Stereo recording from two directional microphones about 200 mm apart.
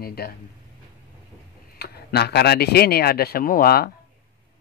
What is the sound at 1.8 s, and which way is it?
Speech, 55° left (ahead or behind).